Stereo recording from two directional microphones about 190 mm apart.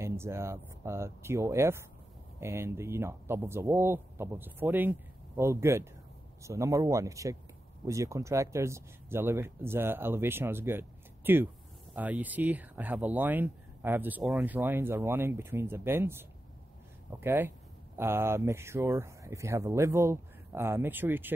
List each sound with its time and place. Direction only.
0.0 s speech: 15° right (ahead or behind)